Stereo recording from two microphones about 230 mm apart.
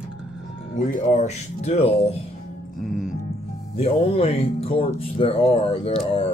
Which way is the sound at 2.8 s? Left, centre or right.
Centre.